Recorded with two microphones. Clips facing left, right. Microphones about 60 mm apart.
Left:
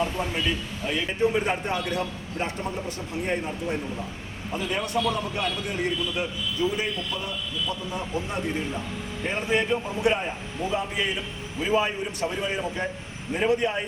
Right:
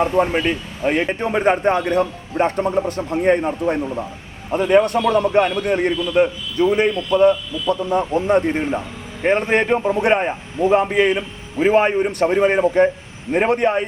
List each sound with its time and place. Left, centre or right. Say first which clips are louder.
0.0 s a man's voice: right 10 dB; right